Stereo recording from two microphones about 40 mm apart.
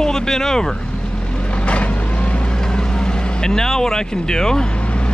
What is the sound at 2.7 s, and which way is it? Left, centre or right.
Vehicle, centre.